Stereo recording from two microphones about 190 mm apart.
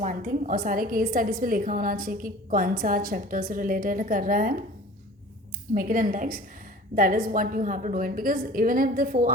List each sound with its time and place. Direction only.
0.0 s a woman's voice: 45° right (ahead or behind)
5.7 s a woman's voice: 45° right (ahead or behind)